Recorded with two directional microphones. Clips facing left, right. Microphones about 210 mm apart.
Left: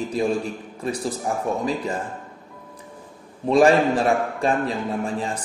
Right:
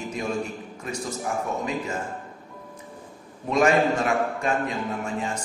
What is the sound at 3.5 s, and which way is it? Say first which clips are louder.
A man's voice: left 4 dB; 30° left (ahead or behind).